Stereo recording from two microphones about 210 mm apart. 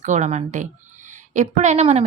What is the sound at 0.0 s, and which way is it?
A woman's voice, 35° right (ahead or behind).